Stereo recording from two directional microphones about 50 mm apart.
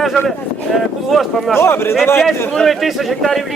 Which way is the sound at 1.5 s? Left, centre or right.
Left.